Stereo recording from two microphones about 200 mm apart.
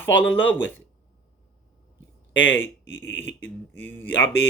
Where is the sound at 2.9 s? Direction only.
75° left (ahead or behind).